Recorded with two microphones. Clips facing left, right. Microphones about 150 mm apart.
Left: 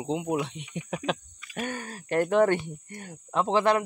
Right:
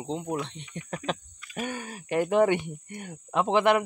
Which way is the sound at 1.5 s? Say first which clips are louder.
Even; 10° right (ahead or behind).